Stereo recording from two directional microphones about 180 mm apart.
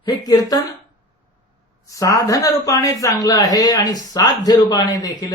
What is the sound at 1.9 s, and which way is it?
A woman's voice, 20° left (ahead or behind).